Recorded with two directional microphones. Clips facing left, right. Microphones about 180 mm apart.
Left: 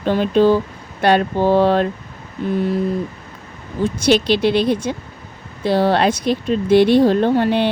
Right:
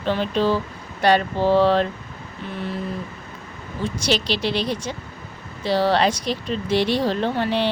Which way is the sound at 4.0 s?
55° left (ahead or behind).